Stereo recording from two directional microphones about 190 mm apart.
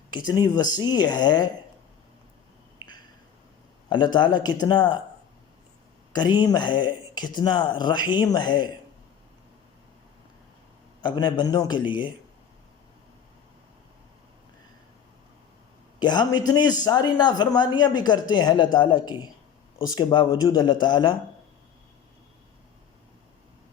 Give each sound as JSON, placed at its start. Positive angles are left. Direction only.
{"t": 0.3, "sound": "speech", "side_deg": 20}
{"t": 2.7, "sound": "a sound", "side_deg": 25}
{"t": 3.8, "sound": "speech", "side_deg": 25}
{"t": 6.1, "sound": "speech", "side_deg": 20}
{"t": 11.0, "sound": "speech", "side_deg": 25}
{"t": 16.0, "sound": "speech", "side_deg": 25}